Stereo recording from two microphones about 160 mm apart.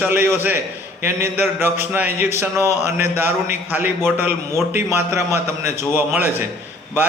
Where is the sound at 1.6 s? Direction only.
10° right (ahead or behind).